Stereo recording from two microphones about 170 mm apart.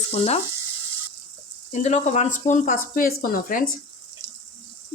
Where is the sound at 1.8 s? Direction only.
40° left (ahead or behind).